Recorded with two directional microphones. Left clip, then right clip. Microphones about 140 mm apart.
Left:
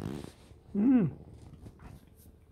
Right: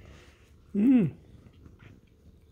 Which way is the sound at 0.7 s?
35° right (ahead or behind).